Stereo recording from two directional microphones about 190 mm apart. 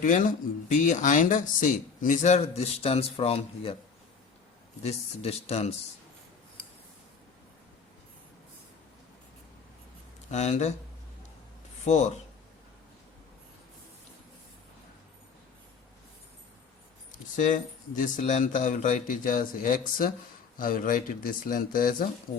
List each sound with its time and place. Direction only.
0.0 s speech: 45° left (ahead or behind)
4.8 s speech: 35° left (ahead or behind)
10.3 s speech: 35° left (ahead or behind)
11.9 s speech: 40° left (ahead or behind)
17.1 s speech: 40° left (ahead or behind)